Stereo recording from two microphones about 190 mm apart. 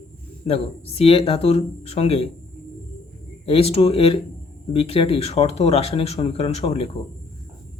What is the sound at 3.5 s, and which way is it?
Speech, 30° left (ahead or behind).